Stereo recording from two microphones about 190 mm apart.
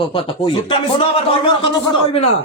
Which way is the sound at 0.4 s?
30° left (ahead or behind).